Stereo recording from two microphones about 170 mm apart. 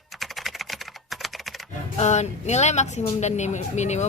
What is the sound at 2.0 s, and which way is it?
A woman's voice, 40° left (ahead or behind).